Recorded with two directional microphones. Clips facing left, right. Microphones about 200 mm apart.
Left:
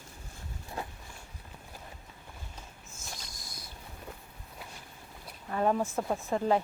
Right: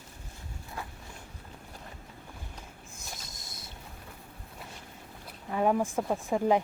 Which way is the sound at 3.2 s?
25° right (ahead or behind).